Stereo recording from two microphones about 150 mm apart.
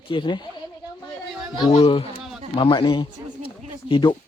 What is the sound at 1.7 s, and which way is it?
Speech, 40° left (ahead or behind).